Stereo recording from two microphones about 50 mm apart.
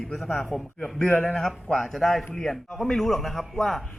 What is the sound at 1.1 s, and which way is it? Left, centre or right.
Speech, left.